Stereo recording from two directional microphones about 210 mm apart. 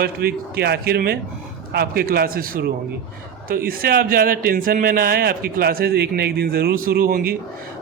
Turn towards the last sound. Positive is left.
turn(degrees=-45)  # may be behind; listen again after turning